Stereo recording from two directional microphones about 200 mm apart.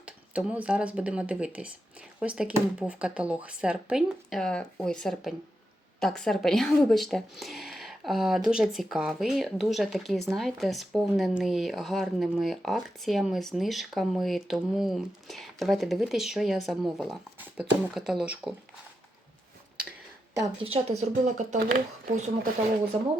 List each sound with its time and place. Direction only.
0.0 s speech: 5° right (ahead or behind)
20.3 s speech: 20° right (ahead or behind)
20.7 s speech: 30° right (ahead or behind)